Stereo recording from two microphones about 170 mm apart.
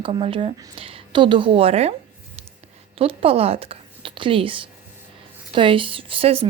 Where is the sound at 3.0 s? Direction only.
35° right (ahead or behind).